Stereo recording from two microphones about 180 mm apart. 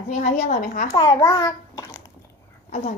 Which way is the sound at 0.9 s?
20° left (ahead or behind).